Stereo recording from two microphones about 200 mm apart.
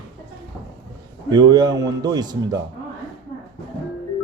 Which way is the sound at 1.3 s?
20° right (ahead or behind).